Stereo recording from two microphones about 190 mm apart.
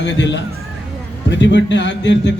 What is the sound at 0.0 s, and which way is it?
A man's voice, 65° left (ahead or behind).